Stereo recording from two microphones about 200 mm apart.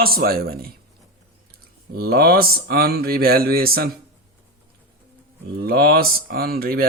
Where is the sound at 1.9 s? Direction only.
50° right (ahead or behind).